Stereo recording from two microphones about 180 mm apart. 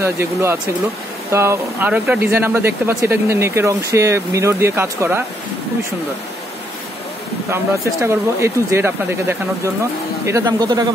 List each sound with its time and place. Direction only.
0.0 s speech: 15° right (ahead or behind)
7.5 s speech: 15° right (ahead or behind)